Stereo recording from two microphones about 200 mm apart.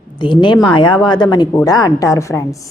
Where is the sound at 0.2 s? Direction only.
25° left (ahead or behind).